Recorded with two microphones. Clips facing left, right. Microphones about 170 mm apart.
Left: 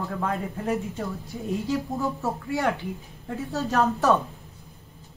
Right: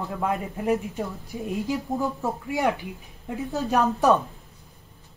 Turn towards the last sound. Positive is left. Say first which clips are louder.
# right 1 dB
turn(degrees=-15)  # may be behind; listen again after turning